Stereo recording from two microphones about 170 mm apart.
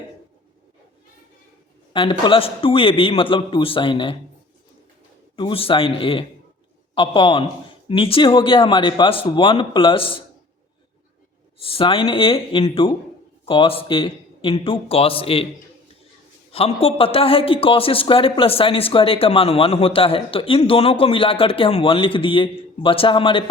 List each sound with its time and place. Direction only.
1.9 s a man's voice: 30° left (ahead or behind)
5.4 s a man's voice: 30° left (ahead or behind)
11.6 s a man's voice: 30° left (ahead or behind)
16.5 s a man's voice: 35° left (ahead or behind)